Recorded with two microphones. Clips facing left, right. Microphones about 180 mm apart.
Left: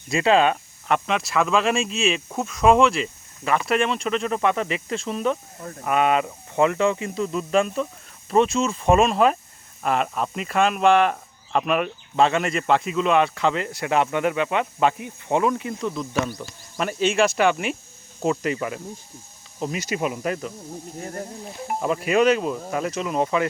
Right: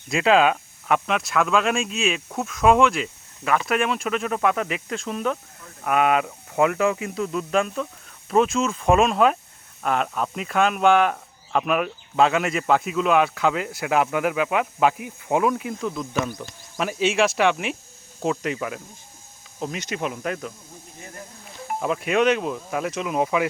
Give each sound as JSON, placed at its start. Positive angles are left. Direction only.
{"t": 0.1, "sound": "speech", "side_deg": 0}
{"t": 21.0, "sound": "speech", "side_deg": 40}
{"t": 21.8, "sound": "speech", "side_deg": 0}